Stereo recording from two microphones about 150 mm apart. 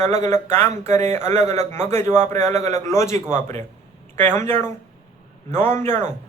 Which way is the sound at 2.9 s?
20° left (ahead or behind).